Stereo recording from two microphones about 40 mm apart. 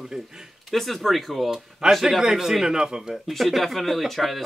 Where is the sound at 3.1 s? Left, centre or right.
Centre.